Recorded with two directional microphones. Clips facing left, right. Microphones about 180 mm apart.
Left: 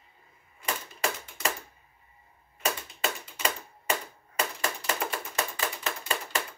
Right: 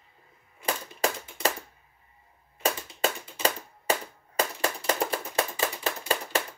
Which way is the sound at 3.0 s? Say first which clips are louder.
Right 6 dB; 35° right (ahead or behind).